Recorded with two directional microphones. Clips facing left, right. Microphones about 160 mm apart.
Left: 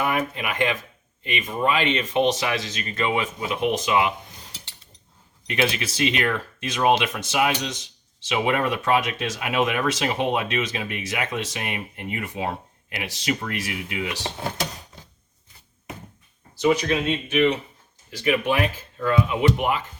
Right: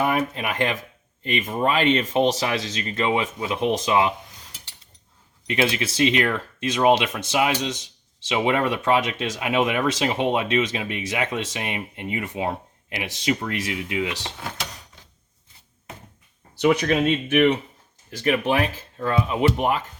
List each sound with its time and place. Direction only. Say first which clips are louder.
0.0 s speech: right 2 dB; 35° right (ahead or behind)
5.5 s speech: right 1 dB; 25° right (ahead or behind)
14.3 s speech: left 4 dB; 25° left (ahead or behind)
16.6 s speech: right 2 dB; 60° right (ahead or behind)
18.2 s speech: right 1 dB; 35° right (ahead or behind)